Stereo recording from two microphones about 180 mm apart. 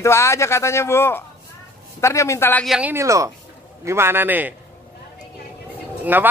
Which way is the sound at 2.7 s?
10° right (ahead or behind).